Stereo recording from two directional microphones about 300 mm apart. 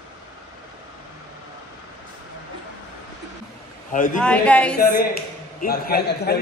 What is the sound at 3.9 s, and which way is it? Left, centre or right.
Speech, left.